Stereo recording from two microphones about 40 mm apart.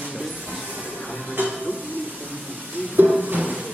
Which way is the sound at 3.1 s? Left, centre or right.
Right.